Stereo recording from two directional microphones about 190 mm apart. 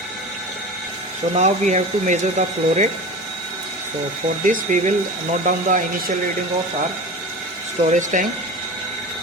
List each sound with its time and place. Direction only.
1.3 s speech: 40° right (ahead or behind)
4.4 s speech: 40° right (ahead or behind)
7.9 s speech: 40° right (ahead or behind)